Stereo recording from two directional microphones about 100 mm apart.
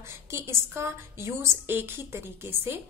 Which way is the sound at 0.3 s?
30° right (ahead or behind).